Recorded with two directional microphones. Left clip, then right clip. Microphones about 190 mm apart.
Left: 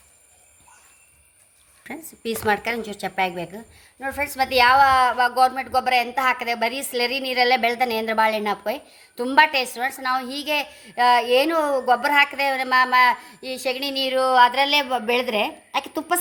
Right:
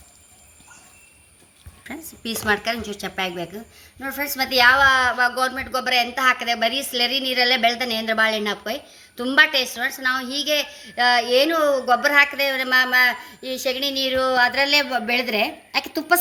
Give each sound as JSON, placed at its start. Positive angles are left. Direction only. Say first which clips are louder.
{"t": 1.8, "sound": "a woman's voice", "louder": "left 1 dB", "side_deg": 40}